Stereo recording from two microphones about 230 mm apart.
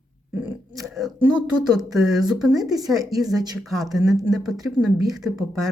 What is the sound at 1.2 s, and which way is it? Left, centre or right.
Speech, centre.